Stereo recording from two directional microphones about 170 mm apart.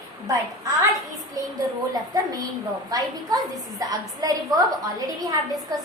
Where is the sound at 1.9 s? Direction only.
20° right (ahead or behind).